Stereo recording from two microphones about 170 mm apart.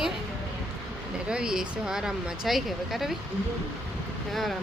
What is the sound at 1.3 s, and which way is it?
Speech, 5° right (ahead or behind).